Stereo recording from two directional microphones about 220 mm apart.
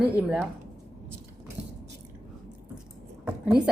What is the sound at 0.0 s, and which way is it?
Speech, 5° right (ahead or behind).